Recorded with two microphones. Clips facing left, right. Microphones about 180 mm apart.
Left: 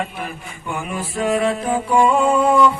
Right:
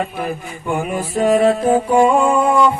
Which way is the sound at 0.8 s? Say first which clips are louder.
Right 4 dB; 40° right (ahead or behind).